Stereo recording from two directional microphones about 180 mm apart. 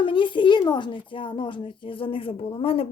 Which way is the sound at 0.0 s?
30° left (ahead or behind).